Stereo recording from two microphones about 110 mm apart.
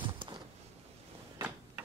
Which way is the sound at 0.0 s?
50° right (ahead or behind).